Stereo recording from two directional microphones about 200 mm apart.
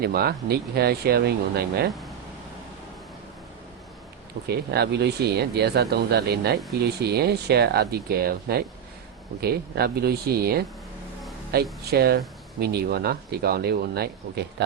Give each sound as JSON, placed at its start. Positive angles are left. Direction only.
{"t": 0.0, "sound": "speech", "side_deg": -50}
{"t": 4.4, "sound": "speech", "side_deg": -55}